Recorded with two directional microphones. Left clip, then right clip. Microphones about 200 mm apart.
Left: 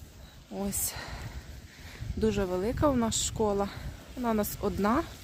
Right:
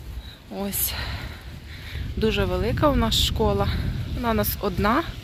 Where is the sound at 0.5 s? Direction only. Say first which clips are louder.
Right 6 dB; 5° left (ahead or behind).